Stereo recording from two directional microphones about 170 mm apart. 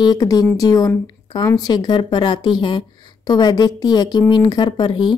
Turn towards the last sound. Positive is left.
turn(degrees=25)  # may be behind; listen again after turning